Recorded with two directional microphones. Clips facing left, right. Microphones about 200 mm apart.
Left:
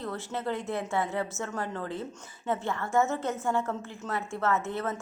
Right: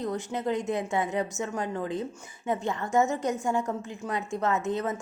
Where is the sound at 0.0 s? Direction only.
15° right (ahead or behind).